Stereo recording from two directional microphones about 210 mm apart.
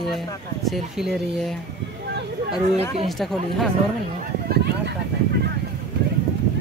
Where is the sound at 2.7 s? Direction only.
30° right (ahead or behind).